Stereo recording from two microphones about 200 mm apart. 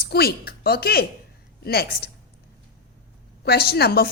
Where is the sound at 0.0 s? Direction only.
50° left (ahead or behind).